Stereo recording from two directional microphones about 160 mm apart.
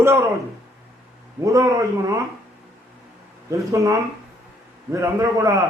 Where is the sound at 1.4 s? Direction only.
20° right (ahead or behind).